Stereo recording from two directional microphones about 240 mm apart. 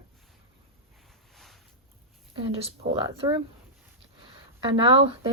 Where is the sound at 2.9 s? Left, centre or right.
Centre.